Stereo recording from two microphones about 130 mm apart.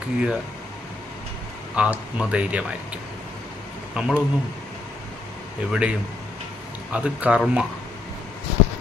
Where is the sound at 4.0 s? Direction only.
5° right (ahead or behind).